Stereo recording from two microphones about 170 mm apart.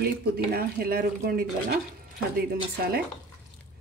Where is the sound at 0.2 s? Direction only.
65° right (ahead or behind).